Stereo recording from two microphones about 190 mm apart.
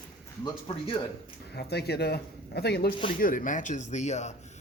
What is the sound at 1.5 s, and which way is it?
A man's voice, 60° left (ahead or behind).